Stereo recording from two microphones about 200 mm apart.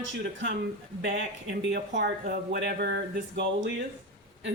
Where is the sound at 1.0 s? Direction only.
55° right (ahead or behind).